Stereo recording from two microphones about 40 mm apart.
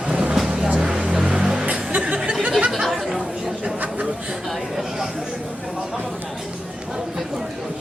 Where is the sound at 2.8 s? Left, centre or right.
Centre.